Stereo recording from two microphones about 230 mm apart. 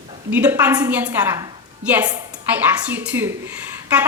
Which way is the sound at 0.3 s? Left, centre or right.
Centre.